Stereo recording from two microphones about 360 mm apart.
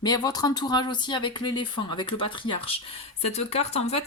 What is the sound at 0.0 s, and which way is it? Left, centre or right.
Speech, centre.